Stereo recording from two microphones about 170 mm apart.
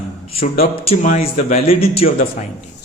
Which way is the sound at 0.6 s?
40° left (ahead or behind).